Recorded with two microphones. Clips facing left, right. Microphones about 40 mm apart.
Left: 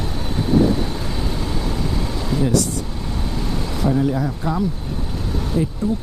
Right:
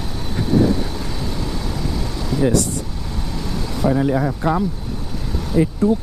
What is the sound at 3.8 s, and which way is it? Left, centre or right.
Speech, centre.